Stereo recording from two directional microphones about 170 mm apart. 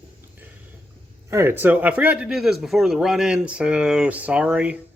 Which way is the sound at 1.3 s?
15° right (ahead or behind).